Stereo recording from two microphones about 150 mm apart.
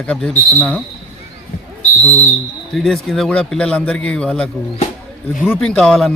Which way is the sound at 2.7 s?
Centre (ahead or behind).